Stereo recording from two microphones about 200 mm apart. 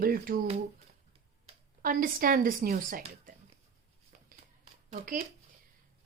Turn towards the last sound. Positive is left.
turn(degrees=-40)  # may be behind; listen again after turning